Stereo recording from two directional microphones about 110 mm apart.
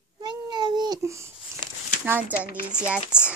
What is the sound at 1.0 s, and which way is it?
Speech, 25° right (ahead or behind).